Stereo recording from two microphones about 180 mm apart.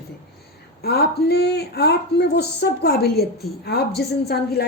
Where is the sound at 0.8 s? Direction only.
60° left (ahead or behind).